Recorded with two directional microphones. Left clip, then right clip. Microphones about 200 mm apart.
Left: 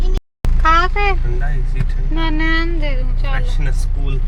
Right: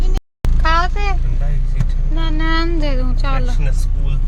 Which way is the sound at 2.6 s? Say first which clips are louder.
Right 1 dB; 20° right (ahead or behind).